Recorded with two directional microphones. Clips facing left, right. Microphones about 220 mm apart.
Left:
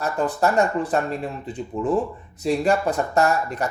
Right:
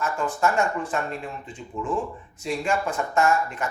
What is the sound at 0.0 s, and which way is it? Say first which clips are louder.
Speech: left 3 dB; 35° left (ahead or behind).